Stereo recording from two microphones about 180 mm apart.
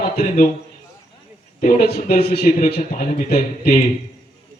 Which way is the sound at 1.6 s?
45° left (ahead or behind).